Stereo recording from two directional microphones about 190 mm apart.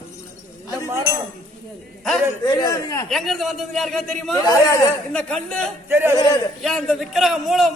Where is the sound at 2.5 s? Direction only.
20° left (ahead or behind).